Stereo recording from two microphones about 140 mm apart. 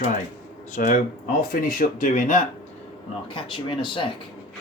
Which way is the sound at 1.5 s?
80° left.